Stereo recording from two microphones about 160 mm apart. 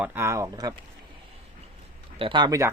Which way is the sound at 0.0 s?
15° right (ahead or behind).